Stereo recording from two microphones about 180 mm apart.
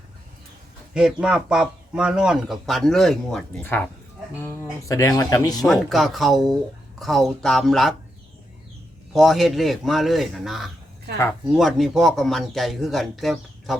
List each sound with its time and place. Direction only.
0.9 s a man's voice: 5° right (ahead or behind); by 5.6 s 20° left (ahead or behind)
5.6 s a man's voice: centre (ahead or behind)
9.1 s a man's voice: centre (ahead or behind)